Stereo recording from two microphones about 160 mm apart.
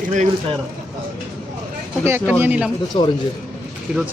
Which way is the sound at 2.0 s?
15° right (ahead or behind).